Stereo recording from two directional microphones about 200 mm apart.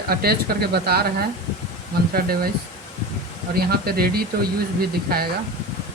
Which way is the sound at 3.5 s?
50° right (ahead or behind).